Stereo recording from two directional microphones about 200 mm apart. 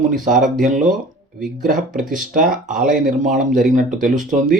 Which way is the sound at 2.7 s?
45° right (ahead or behind).